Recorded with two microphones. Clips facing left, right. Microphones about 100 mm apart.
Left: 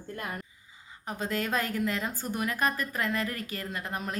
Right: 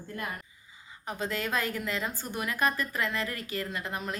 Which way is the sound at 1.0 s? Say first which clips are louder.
Left 1 dB; 45° left (ahead or behind).